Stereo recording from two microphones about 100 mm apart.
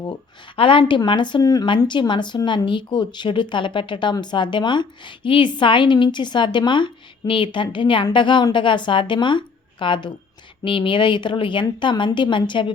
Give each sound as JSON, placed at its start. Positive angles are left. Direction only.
{"t": 0.5, "sound": "speech", "side_deg": 60}
{"t": 1.8, "sound": "speech", "side_deg": 50}